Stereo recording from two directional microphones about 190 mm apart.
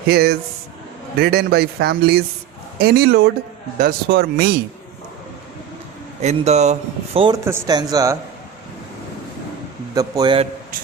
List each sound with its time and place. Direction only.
0.1 s speech: 55° right (ahead or behind)
6.2 s speech: 35° right (ahead or behind)
7.4 s speech: 15° right (ahead or behind)
9.9 s speech: 20° right (ahead or behind)